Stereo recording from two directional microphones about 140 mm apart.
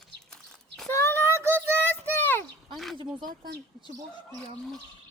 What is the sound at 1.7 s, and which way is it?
Child singing, 15° left (ahead or behind).